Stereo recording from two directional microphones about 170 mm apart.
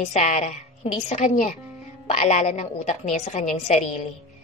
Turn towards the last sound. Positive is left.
turn(degrees=45)  # may be behind; listen again after turning